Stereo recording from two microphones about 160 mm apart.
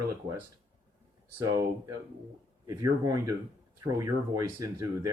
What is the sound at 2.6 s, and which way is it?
Speech, 20° right (ahead or behind).